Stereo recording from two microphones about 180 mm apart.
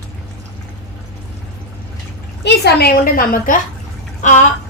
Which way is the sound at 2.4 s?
60° left (ahead or behind).